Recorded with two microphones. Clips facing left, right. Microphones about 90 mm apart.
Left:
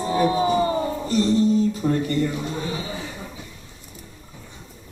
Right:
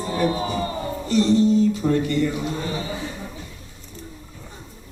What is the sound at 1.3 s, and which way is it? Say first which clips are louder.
Speech: right 2 dB; 40° left (ahead or behind).